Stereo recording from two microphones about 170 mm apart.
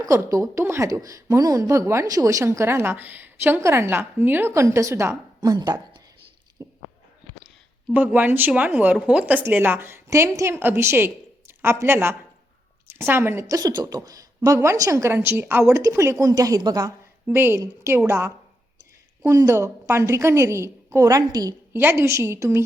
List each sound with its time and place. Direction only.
0.0 s a woman's voice: 15° right (ahead or behind)
6.6 s squish: 20° right (ahead or behind)
7.9 s a woman's voice: 10° right (ahead or behind)
17.2 s a woman's voice: 15° right (ahead or behind)